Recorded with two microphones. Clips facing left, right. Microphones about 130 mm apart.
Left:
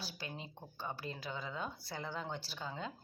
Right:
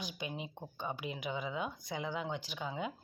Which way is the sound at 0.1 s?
15° right (ahead or behind).